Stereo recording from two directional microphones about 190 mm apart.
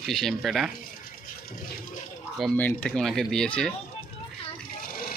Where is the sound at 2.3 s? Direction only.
5° left (ahead or behind).